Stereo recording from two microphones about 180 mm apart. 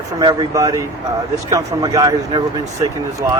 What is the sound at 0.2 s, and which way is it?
Speech, 25° right (ahead or behind).